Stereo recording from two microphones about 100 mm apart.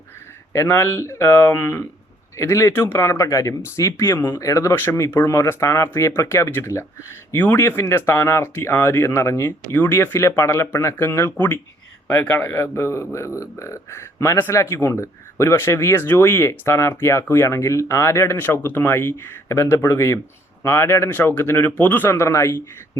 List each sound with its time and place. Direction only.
0.5 s speech: 25° left (ahead or behind)